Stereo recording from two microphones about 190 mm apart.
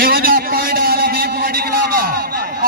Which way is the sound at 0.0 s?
50° right (ahead or behind).